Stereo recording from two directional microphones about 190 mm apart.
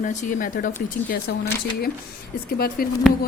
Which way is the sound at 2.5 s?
55° left (ahead or behind).